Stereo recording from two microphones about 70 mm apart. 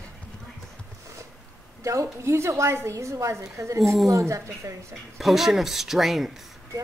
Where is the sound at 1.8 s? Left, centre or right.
Right.